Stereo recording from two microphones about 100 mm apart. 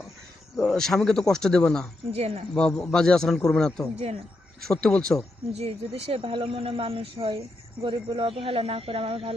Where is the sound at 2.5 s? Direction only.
5° left (ahead or behind).